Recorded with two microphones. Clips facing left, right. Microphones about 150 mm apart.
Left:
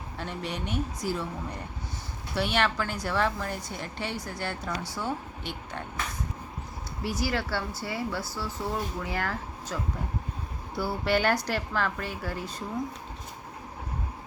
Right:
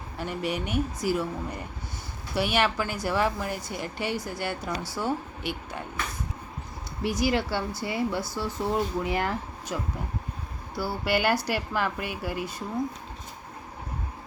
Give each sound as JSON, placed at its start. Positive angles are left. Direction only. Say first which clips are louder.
{"t": 0.2, "sound": "a woman's voice", "louder": "right 5 dB", "side_deg": -10}
{"t": 7.0, "sound": "a woman's voice", "louder": "right 4 dB", "side_deg": -15}
{"t": 10.8, "sound": "a woman's voice", "louder": "even", "side_deg": -5}